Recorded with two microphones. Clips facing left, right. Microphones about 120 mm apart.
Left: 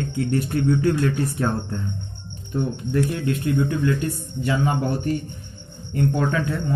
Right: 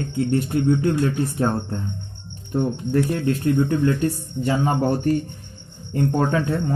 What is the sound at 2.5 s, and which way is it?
Speech, 40° right (ahead or behind).